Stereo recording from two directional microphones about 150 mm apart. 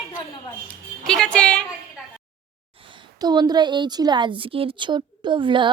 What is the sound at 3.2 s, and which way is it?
A woman's voice, 25° right (ahead or behind).